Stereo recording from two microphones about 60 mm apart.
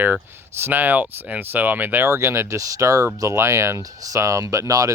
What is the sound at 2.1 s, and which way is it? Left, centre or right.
Speech, right.